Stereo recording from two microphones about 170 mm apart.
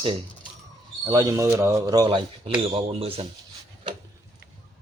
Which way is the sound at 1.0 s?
20° right (ahead or behind).